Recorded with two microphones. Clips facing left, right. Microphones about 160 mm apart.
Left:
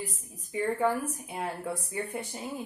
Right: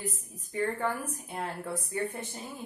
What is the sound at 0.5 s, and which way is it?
A woman's voice, 10° left (ahead or behind).